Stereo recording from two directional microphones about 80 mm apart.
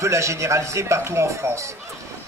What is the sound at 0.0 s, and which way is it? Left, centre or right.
Speech, right.